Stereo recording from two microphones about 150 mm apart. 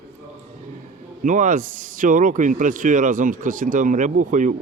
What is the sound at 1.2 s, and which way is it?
Speech, 55° right (ahead or behind).